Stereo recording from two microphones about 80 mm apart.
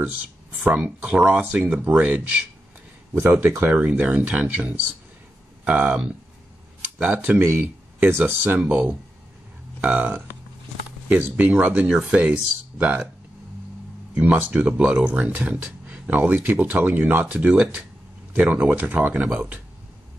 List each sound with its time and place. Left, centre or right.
0.7 s speech: right
3.3 s speech: right
3.7 s speech: centre
7.1 s speech: right
14.5 s speech: centre